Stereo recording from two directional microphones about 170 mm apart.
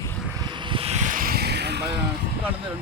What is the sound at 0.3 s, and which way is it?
Vehicle, 25° right (ahead or behind).